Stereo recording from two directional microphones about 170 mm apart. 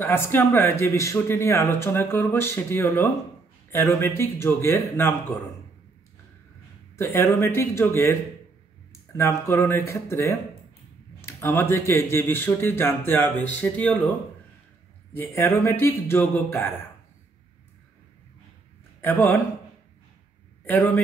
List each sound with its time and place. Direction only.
0.0 s speech: 10° left (ahead or behind)
7.0 s speech: 15° left (ahead or behind)
15.1 s speech: 10° left (ahead or behind)
18.9 s a man's voice: 15° left (ahead or behind)
20.6 s speech: 10° left (ahead or behind)